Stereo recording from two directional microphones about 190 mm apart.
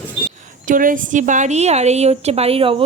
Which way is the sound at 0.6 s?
45° right (ahead or behind).